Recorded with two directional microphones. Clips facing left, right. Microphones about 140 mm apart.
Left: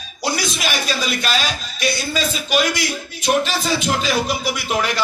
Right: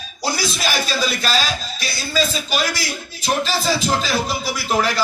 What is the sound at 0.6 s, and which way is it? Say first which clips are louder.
Music: even; 35° right (ahead or behind).